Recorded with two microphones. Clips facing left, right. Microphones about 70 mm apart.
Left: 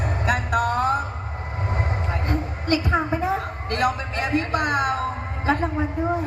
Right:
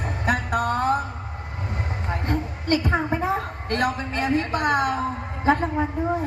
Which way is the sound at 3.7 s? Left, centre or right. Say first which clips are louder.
Left 1 dB; right.